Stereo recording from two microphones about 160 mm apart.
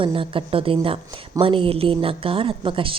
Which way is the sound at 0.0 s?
35° right (ahead or behind).